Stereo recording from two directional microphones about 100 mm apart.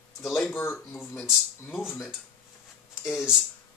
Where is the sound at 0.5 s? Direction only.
25° left (ahead or behind).